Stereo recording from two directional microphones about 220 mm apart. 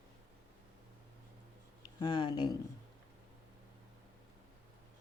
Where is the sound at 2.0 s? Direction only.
20° left (ahead or behind).